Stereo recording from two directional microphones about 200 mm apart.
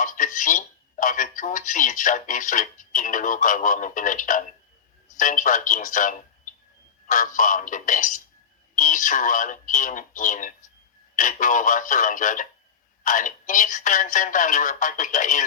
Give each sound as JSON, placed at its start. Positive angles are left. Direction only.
{"t": 0.0, "sound": "speech", "side_deg": 40}